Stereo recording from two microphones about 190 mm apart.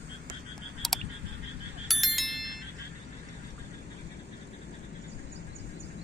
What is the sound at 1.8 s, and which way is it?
Wind chime, centre (ahead or behind).